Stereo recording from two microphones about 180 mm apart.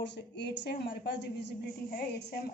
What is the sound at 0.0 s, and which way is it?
A woman's voice, 70° left (ahead or behind).